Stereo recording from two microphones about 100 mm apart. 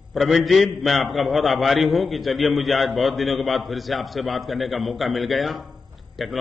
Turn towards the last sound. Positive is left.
turn(degrees=0)  # may be behind; listen again after turning